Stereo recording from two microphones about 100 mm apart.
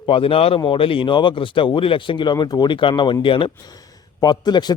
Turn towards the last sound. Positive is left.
turn(degrees=45)  # may be behind; listen again after turning